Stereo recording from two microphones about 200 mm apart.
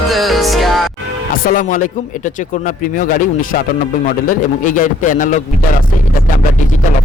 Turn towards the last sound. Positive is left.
turn(degrees=40)  # may be behind; listen again after turning